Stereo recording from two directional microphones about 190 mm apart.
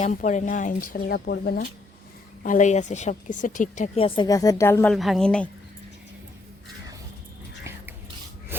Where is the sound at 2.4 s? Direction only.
40° left (ahead or behind).